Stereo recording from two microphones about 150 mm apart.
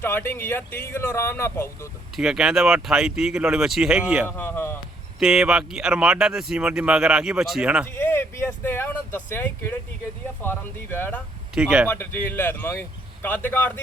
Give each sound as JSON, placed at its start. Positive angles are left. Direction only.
{"t": 0.0, "sound": "speech", "side_deg": 15}
{"t": 2.1, "sound": "speech", "side_deg": -5}
{"t": 4.3, "sound": "speech", "side_deg": 15}
{"t": 5.2, "sound": "speech", "side_deg": -5}
{"t": 7.9, "sound": "vehicle", "side_deg": 15}
{"t": 10.4, "sound": "speech", "side_deg": 15}
{"t": 11.5, "sound": "speech", "side_deg": -5}
{"t": 11.9, "sound": "speech", "side_deg": 15}